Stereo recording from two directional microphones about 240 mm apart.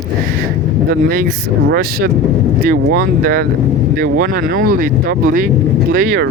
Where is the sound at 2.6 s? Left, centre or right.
Right.